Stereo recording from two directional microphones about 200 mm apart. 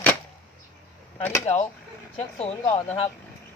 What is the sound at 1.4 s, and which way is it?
Speech, 30° left (ahead or behind).